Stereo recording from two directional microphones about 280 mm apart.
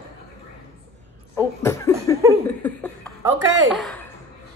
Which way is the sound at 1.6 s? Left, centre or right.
Centre.